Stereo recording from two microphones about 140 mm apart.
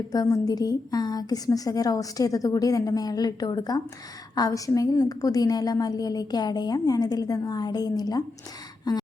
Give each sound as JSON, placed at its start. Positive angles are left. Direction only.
{"t": 0.1, "sound": "a woman's voice", "side_deg": 25}